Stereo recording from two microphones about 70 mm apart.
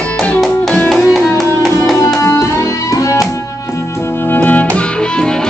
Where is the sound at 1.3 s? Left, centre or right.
Centre.